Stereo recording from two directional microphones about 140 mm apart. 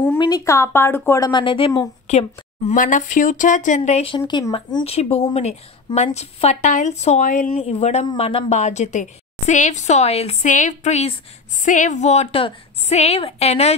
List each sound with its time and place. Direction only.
0.2 s a woman's voice: 25° left (ahead or behind)
1.3 s speech: 35° left (ahead or behind)
2.0 s a woman's voice: 55° left (ahead or behind)
4.3 s speech: 30° left (ahead or behind)
4.8 s a woman's voice: 45° left (ahead or behind)
11.6 s a woman's voice: 65° left (ahead or behind); by 13.7 s 50° left (ahead or behind)